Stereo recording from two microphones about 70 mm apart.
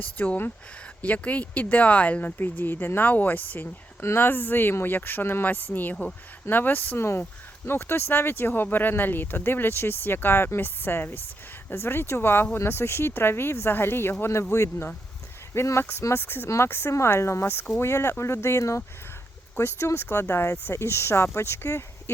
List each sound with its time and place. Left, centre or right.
0.0 s speech: left